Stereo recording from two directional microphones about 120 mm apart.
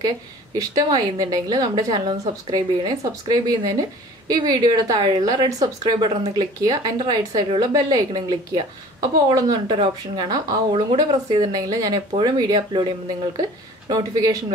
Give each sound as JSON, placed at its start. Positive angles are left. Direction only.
{"t": 0.6, "sound": "speech", "side_deg": -30}